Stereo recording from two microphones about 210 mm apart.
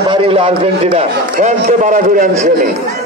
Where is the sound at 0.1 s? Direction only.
25° right (ahead or behind).